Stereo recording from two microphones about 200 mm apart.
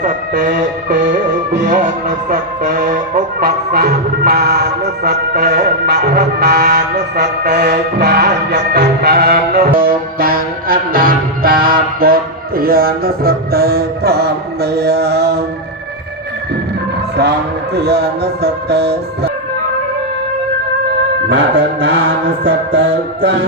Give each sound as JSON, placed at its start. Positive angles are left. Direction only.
{"t": 0.0, "sound": "music", "side_deg": -40}
{"t": 1.5, "sound": "speech", "side_deg": -40}
{"t": 5.4, "sound": "music", "side_deg": -55}
{"t": 17.7, "sound": "music", "side_deg": -55}
{"t": 21.5, "sound": "music", "side_deg": -25}